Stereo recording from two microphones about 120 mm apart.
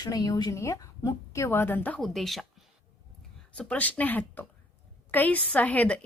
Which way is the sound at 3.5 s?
10° left (ahead or behind).